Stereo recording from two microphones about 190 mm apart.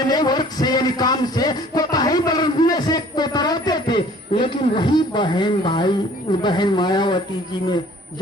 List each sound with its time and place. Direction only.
0.0 s music: 20° left (ahead or behind)
6.4 s speech: 25° left (ahead or behind)